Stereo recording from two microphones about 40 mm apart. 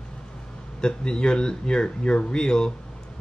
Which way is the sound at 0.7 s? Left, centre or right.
Left.